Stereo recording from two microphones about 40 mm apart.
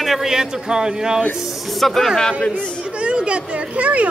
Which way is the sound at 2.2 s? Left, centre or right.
Centre.